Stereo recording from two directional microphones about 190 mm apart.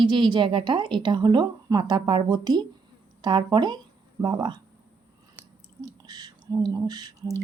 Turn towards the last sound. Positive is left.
turn(degrees=-20)  # may be behind; listen again after turning